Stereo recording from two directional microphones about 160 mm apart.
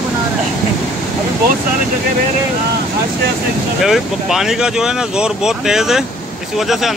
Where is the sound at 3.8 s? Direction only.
Centre (ahead or behind).